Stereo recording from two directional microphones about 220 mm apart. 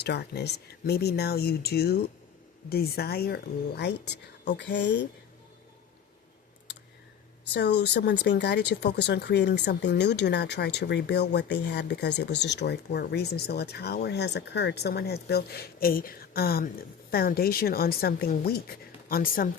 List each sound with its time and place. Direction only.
0.0 s speech: 50° left (ahead or behind)
7.5 s speech: 50° left (ahead or behind)